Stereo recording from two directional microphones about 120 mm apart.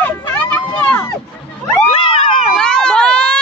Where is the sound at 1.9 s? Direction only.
45° left (ahead or behind).